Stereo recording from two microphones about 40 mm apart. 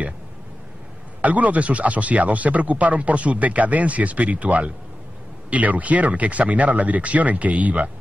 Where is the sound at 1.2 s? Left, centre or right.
Right.